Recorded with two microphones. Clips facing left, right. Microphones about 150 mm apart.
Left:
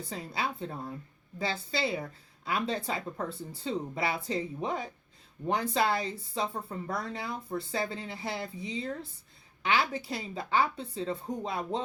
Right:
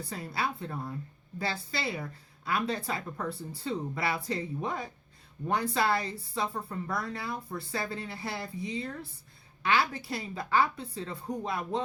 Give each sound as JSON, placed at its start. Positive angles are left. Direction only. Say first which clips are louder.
{"t": 0.1, "sound": "speech", "louder": "right 1 dB", "side_deg": 25}